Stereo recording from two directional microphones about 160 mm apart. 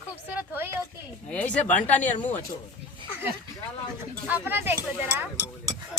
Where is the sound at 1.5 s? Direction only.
10° left (ahead or behind).